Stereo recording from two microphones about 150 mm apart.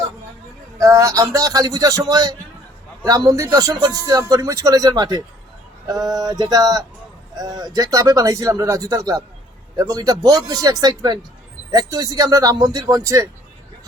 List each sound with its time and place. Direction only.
0.8 s speech: 20° right (ahead or behind)